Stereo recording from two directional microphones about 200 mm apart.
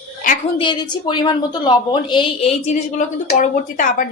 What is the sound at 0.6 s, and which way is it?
A woman's voice, 20° left (ahead or behind).